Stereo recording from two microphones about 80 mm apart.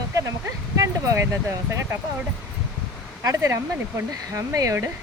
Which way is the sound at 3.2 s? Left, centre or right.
Right.